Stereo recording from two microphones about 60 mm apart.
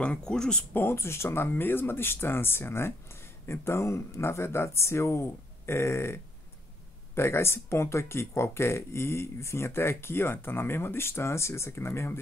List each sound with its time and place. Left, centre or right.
0.0 s speech: centre
0.7 s speech: left
7.2 s speech: left